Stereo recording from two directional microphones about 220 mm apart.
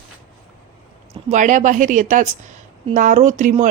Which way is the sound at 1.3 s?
35° right (ahead or behind).